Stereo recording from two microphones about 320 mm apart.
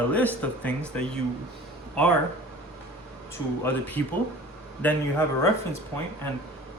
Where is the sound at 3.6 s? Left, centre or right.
Centre.